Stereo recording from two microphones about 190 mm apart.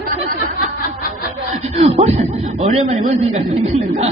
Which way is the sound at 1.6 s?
35° right (ahead or behind).